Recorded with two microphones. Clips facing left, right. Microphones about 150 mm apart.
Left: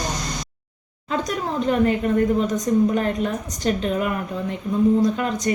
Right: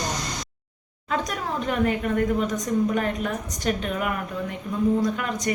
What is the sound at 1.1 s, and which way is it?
A woman's voice, 30° left (ahead or behind).